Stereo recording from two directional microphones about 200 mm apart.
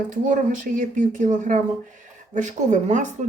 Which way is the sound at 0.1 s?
40° right (ahead or behind).